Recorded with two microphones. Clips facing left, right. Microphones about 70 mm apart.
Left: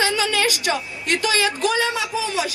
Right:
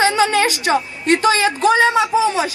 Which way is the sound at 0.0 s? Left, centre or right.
Right.